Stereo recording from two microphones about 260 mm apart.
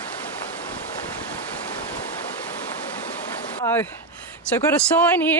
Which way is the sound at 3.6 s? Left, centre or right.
Centre.